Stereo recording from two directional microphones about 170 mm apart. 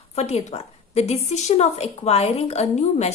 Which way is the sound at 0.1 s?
40° left (ahead or behind).